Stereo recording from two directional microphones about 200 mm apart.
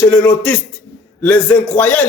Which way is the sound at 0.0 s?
10° left (ahead or behind).